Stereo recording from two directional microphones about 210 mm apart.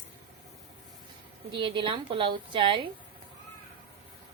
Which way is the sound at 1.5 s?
25° right (ahead or behind).